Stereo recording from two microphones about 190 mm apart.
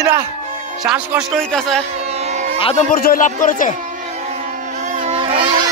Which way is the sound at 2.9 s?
50° left (ahead or behind).